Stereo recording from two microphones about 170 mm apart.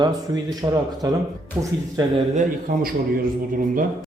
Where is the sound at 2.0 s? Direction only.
25° right (ahead or behind).